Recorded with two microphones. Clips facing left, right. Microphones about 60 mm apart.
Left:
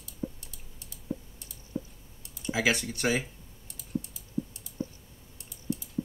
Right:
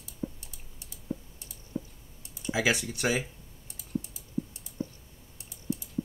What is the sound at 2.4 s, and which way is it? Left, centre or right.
Speech, centre.